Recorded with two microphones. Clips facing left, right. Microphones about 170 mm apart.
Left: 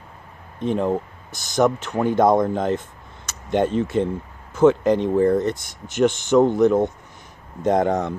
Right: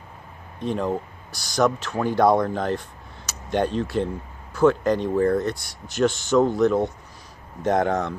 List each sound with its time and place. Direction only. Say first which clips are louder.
0.6 s speech: left 4 dB; 20° left (ahead or behind)